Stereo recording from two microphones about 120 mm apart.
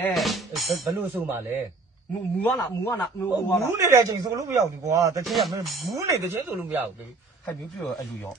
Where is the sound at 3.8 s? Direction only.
30° right (ahead or behind).